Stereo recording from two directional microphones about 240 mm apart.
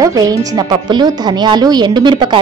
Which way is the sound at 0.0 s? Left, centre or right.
Centre.